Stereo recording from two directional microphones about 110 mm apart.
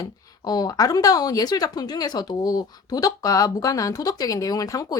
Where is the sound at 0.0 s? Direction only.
35° left (ahead or behind).